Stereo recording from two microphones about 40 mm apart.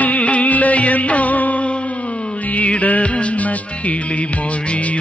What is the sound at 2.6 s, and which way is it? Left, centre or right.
Music, left.